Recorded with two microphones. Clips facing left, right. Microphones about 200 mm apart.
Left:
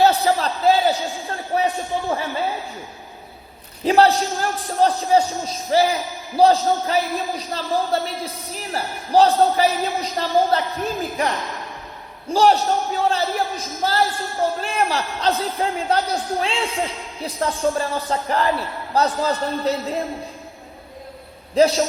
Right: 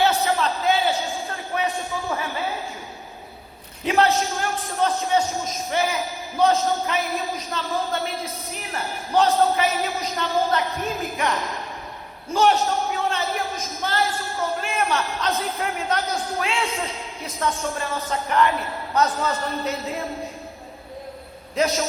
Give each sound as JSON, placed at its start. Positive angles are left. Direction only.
{"t": 0.0, "sound": "a sound", "side_deg": 35}
{"t": 3.8, "sound": "a man's voice", "side_deg": 35}
{"t": 12.3, "sound": "a man's voice", "side_deg": 35}
{"t": 21.5, "sound": "a man's voice", "side_deg": 30}